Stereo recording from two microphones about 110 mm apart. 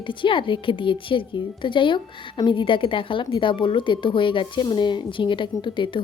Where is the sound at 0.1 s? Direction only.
50° left (ahead or behind).